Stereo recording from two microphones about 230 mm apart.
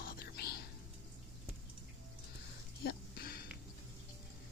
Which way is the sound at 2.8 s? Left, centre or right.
Left.